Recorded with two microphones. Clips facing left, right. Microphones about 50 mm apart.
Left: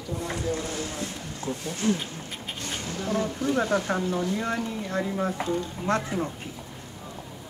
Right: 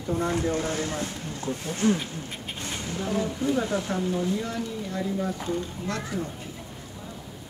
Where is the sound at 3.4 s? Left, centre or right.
Left.